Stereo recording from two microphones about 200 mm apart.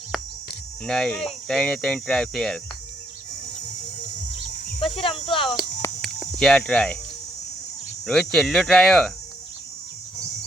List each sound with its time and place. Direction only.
0.9 s speech: centre (ahead or behind)
4.8 s a sound: 25° left (ahead or behind)
6.0 s cricket: centre (ahead or behind)
8.0 s speech: centre (ahead or behind)